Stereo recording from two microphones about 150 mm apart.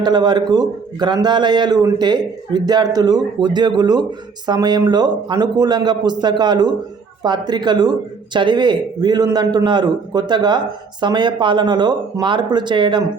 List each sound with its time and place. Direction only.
0.0 s a man's voice: 30° right (ahead or behind)